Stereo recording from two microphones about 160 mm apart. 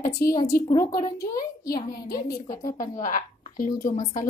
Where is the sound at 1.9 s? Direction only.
70° left (ahead or behind).